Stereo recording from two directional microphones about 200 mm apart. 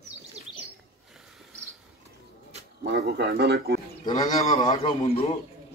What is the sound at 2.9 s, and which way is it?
Speech, 55° right (ahead or behind).